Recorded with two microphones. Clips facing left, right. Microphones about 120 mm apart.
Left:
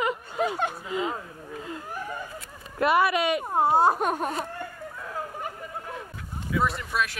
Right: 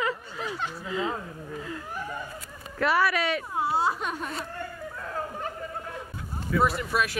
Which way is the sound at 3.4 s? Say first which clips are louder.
Left 5 dB; 50° left (ahead or behind).